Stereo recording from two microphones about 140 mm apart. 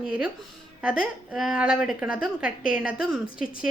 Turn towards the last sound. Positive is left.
turn(degrees=-5)  # may be behind; listen again after turning